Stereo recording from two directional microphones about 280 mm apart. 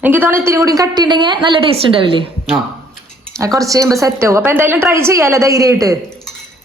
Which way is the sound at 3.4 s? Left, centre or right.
Centre.